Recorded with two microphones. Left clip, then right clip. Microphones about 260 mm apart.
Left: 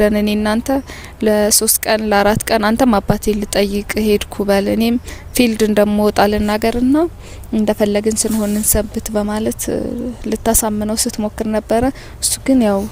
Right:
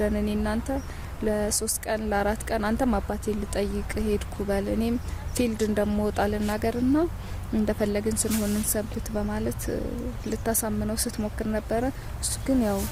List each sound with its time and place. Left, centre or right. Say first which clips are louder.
0.0 s speech: left 12 dB; left